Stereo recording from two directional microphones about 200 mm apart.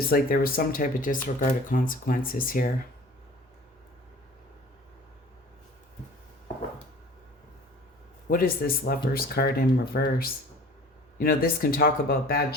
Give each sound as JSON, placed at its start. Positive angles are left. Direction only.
{"t": 0.0, "sound": "speech", "side_deg": 45}
{"t": 8.3, "sound": "speech", "side_deg": 45}